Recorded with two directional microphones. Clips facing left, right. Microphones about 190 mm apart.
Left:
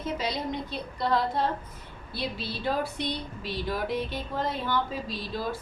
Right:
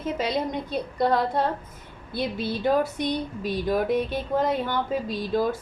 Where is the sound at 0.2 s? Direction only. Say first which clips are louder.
Right 5 dB; 50° right (ahead or behind).